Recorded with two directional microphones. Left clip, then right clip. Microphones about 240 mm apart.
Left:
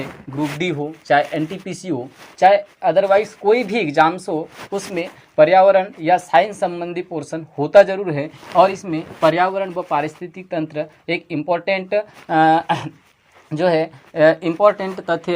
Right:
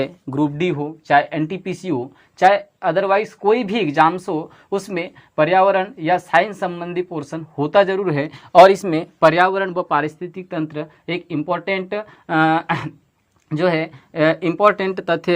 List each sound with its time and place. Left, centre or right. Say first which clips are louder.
0.6 s speech: right 1 dB; centre; by 15.3 s right